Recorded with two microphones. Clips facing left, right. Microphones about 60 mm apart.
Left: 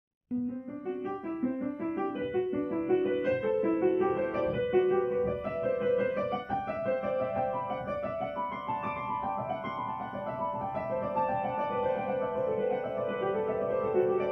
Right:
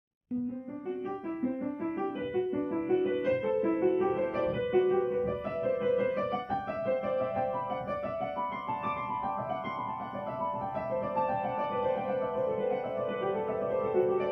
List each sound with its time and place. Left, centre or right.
2.9 s music: left
7.3 s music: centre
8.8 s music: centre
11.1 s music: centre